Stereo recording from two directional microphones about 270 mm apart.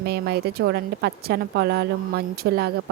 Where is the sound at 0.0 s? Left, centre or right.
Right.